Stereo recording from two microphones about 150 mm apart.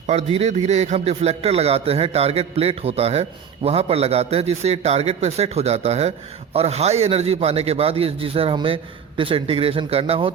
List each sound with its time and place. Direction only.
0.1 s a man's voice: 45° right (ahead or behind)